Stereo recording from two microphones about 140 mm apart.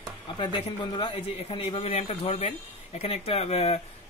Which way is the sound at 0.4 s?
40° left (ahead or behind).